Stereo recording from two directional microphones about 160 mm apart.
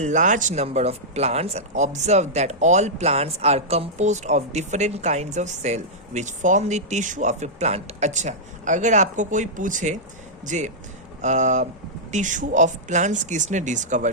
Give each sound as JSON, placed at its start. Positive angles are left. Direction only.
{"t": 0.0, "sound": "speech", "side_deg": -50}